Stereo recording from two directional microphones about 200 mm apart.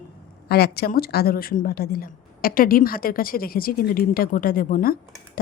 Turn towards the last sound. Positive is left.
turn(degrees=45)  # may be behind; listen again after turning